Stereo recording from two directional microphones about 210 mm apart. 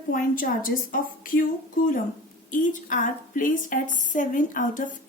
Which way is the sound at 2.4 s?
40° left (ahead or behind).